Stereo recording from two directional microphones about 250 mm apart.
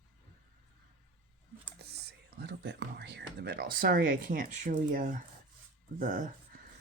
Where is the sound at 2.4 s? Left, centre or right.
Right.